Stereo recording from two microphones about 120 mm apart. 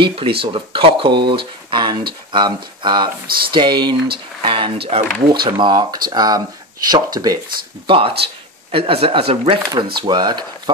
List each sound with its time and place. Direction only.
0.0 s speech: 50° right (ahead or behind)
7.8 s speech: 50° right (ahead or behind)
9.7 s speech: 40° right (ahead or behind)